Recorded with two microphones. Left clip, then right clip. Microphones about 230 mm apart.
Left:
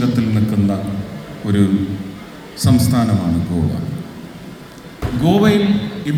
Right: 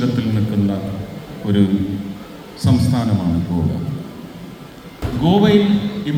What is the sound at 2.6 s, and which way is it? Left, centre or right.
Speech, left.